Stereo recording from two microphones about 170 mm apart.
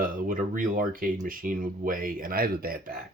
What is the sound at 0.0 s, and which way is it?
Speech, 55° right (ahead or behind).